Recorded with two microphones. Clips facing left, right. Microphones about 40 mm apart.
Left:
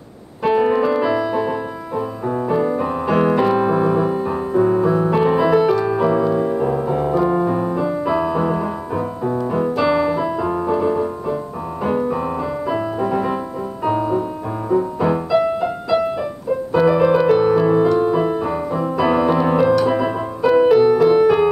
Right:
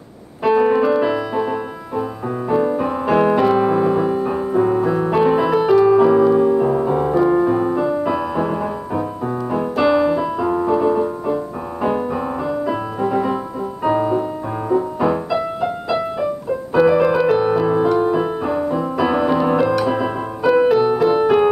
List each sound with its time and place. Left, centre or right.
0.4 s music: centre
13.8 s music: centre
16.7 s piano: centre